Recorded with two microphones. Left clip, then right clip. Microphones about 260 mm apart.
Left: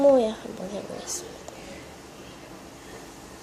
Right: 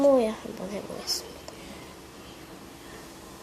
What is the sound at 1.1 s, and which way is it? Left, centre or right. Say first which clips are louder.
Speech: right 7 dB; right.